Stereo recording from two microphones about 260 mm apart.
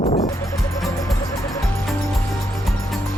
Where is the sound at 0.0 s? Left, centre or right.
Left.